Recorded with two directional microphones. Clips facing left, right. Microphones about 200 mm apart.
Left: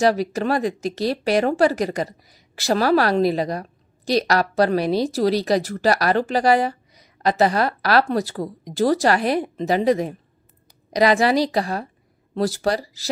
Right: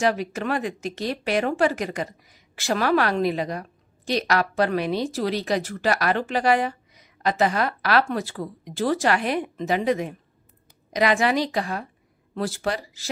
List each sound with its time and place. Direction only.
0.0 s speech: 35° left (ahead or behind)